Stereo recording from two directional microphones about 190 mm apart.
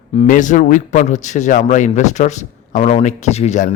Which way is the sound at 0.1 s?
40° left (ahead or behind).